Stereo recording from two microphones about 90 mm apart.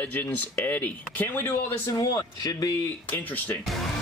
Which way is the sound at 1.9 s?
45° left (ahead or behind).